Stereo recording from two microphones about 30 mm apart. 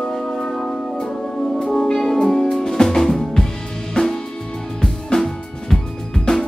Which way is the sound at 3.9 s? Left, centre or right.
Centre.